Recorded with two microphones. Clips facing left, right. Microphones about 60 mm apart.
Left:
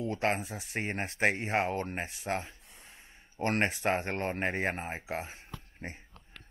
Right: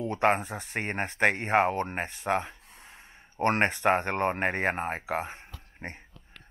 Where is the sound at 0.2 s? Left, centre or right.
Right.